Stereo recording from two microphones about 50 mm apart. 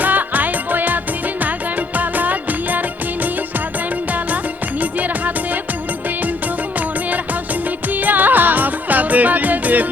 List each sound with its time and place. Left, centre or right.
0.0 s music: right
2.0 s music: right
4.8 s music: right
7.9 s music: right